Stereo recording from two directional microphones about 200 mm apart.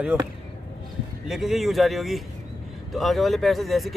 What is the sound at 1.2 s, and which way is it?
Speech, centre (ahead or behind).